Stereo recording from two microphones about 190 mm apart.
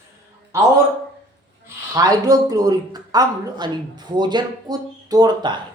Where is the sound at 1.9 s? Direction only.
20° right (ahead or behind).